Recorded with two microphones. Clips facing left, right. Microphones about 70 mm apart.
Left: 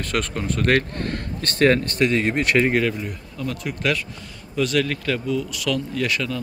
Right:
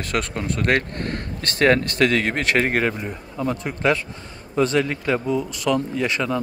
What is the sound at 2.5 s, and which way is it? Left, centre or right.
Speech, right.